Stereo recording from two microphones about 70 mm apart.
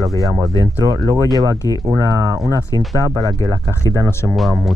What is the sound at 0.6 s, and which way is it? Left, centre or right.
Speech, right.